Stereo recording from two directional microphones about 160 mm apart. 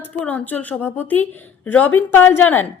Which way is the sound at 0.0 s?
10° left (ahead or behind).